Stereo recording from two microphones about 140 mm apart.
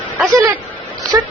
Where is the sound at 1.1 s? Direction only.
20° right (ahead or behind).